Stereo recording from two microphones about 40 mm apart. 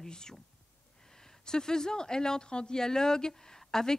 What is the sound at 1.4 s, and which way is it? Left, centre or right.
A woman's voice, centre.